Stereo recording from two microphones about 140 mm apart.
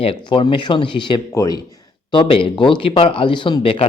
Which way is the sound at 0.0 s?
40° left (ahead or behind).